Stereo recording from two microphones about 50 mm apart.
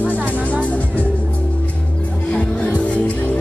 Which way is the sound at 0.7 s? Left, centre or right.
Left.